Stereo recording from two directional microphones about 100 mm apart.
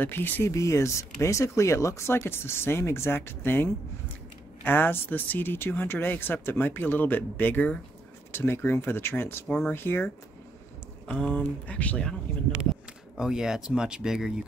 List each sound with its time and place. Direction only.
0.0 s speech: 20° left (ahead or behind)
13.2 s speech: 5° right (ahead or behind)